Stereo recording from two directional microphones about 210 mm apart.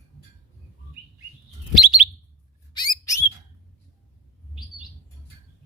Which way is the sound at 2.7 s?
15° left (ahead or behind).